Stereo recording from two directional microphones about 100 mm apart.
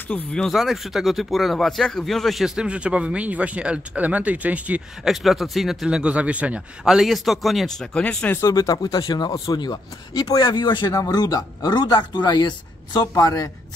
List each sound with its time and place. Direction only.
0.1 s speech: 10° left (ahead or behind); by 4.8 s 15° right (ahead or behind)
5.0 s speech: centre (ahead or behind)
8.4 s speech: 35° left (ahead or behind)